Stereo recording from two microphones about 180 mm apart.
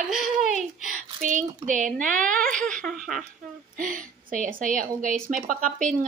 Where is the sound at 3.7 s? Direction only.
50° right (ahead or behind).